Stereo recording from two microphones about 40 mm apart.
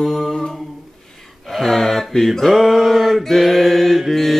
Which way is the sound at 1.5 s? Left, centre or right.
Centre.